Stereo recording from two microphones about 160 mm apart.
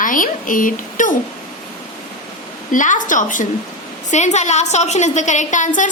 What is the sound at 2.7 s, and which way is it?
A woman's voice, 55° left (ahead or behind).